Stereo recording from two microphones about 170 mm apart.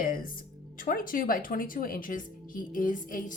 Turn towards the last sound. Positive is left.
turn(degrees=50)  # may be behind; listen again after turning